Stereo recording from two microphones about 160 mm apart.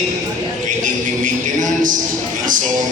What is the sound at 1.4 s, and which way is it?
Speech, 50° right (ahead or behind).